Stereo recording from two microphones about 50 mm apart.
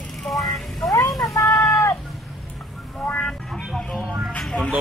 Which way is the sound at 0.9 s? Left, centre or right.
Left.